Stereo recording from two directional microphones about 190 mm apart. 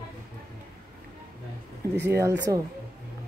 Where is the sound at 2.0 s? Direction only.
15° right (ahead or behind).